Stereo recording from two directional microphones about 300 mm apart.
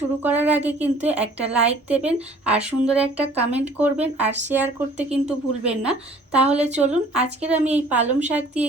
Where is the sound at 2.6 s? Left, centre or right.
Centre.